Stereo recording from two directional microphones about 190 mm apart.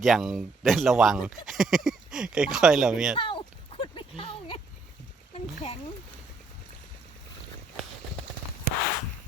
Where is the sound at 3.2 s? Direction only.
25° left (ahead or behind).